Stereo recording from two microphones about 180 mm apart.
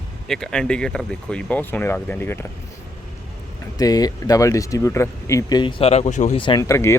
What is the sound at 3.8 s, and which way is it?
Speech, 20° left (ahead or behind).